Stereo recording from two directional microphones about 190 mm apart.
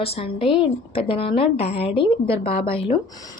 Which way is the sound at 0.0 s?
30° left (ahead or behind).